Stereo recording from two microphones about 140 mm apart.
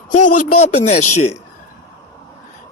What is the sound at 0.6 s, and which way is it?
Speech, 55° left (ahead or behind).